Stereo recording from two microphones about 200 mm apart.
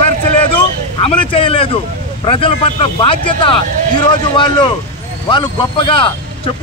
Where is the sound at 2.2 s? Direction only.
25° left (ahead or behind).